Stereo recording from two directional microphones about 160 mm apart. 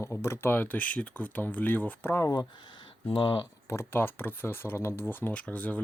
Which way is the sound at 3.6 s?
15° left (ahead or behind).